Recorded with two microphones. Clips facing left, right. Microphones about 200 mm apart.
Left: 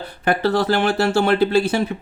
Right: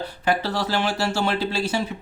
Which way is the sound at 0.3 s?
55° left (ahead or behind).